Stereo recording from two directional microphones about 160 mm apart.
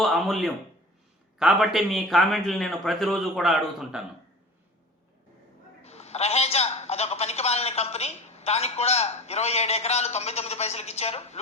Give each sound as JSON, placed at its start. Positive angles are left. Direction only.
{"t": 0.0, "sound": "a man's voice", "side_deg": 0}
{"t": 5.8, "sound": "a man's voice", "side_deg": 40}